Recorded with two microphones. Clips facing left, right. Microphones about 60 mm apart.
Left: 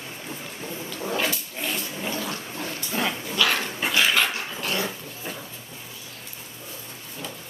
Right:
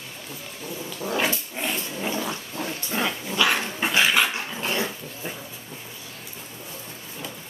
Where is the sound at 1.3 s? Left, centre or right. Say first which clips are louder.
Right 2 dB; right.